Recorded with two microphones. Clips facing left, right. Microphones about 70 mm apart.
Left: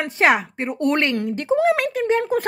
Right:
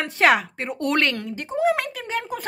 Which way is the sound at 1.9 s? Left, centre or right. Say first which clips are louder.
Left 9 dB; left.